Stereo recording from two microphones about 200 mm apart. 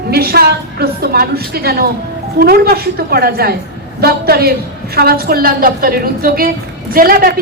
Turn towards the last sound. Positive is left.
turn(degrees=-45)  # may be behind; listen again after turning